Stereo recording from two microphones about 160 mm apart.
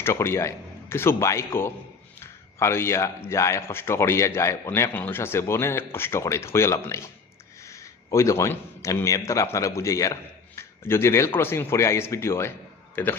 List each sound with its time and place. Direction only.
0.0 s speech: 15° left (ahead or behind)